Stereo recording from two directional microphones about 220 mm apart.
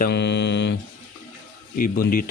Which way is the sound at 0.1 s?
50° left (ahead or behind).